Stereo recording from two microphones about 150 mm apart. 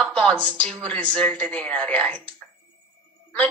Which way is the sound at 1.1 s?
10° left (ahead or behind).